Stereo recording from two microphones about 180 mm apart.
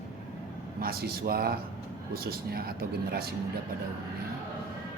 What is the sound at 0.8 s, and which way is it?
Speech, 60° right (ahead or behind).